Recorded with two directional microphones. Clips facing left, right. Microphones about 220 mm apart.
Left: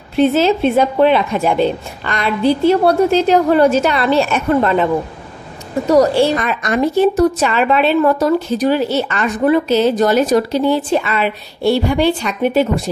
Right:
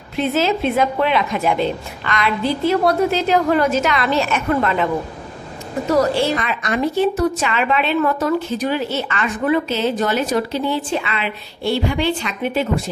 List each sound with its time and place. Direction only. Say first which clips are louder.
0.3 s a woman's voice: left 5 dB; 30° left (ahead or behind)
5.9 s a woman's voice: left 5 dB; 35° left (ahead or behind)